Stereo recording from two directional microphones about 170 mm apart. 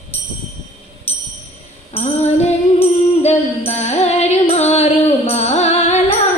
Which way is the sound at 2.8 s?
40° left (ahead or behind).